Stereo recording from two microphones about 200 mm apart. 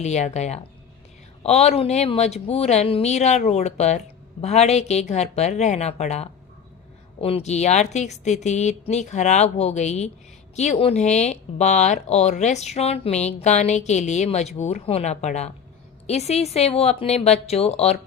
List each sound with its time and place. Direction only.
0.0 s speech: 35° left (ahead or behind)